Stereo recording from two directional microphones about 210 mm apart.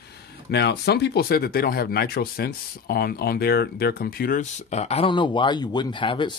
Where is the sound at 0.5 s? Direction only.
55° left (ahead or behind).